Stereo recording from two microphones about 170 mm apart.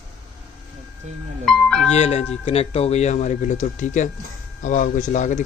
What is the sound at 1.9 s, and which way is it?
Speech, 40° left (ahead or behind).